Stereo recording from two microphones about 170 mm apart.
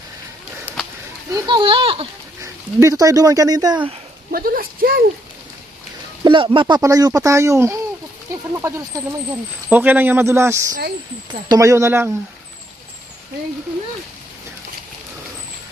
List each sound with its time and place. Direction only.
1.3 s speech: 30° right (ahead or behind)
2.4 s speech: 20° right (ahead or behind)
4.3 s speech: 60° right (ahead or behind)
6.2 s a man's voice: 30° right (ahead or behind); by 12.1 s 15° right (ahead or behind)